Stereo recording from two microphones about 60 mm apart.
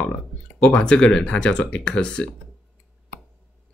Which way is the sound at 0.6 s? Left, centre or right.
Left.